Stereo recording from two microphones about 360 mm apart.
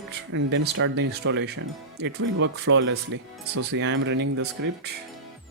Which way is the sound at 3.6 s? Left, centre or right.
Right.